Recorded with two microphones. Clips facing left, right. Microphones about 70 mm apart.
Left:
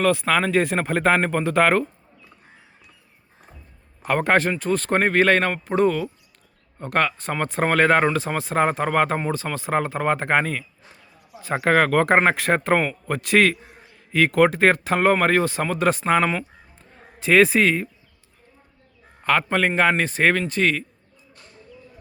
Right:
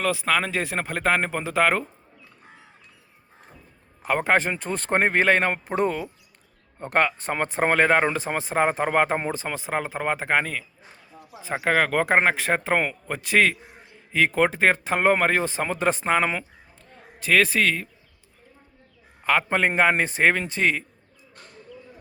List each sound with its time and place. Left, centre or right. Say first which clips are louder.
0.0 s speech: left 4 dB; centre
4.0 s speech: left 2 dB; centre
7.5 s a man's voice: left 2 dB; centre
17.2 s a man's voice: left 4 dB; centre
19.2 s speech: left 1 dB; centre